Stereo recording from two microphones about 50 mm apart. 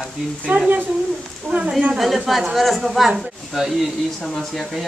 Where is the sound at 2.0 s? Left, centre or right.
Centre.